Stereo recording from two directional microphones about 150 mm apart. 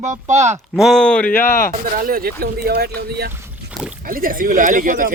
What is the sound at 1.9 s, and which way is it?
Speech, 75° right (ahead or behind).